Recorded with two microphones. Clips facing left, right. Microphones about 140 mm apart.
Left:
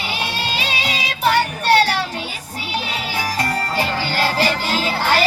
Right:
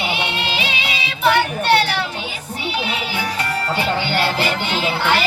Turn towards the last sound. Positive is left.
turn(degrees=40)  # may be behind; listen again after turning